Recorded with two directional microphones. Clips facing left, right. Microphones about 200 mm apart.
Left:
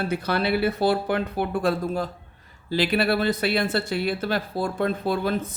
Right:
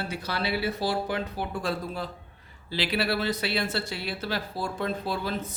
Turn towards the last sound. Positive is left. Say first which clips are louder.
# left 6 dB
turn(degrees=55)  # may be behind; listen again after turning